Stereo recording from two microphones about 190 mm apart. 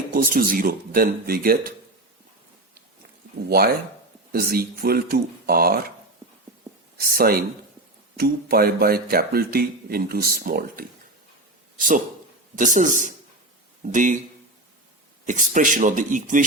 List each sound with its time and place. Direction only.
0.1 s speech: 50° right (ahead or behind)
4.3 s speech: 50° right (ahead or behind)
7.0 s speech: 50° right (ahead or behind)
11.8 s speech: 45° right (ahead or behind)
15.3 s speech: 45° right (ahead or behind)